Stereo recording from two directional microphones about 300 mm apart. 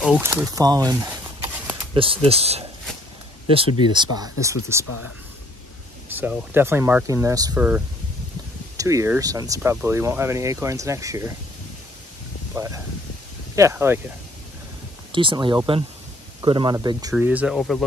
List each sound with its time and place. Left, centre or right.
0.0 s speech: centre
4.8 s speech: left
6.1 s speech: centre
12.5 s speech: centre
15.1 s speech: centre